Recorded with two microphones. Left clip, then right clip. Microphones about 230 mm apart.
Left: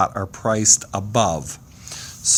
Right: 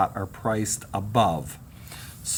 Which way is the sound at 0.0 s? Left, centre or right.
Left.